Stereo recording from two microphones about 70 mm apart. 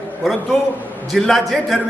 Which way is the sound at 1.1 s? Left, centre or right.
Centre.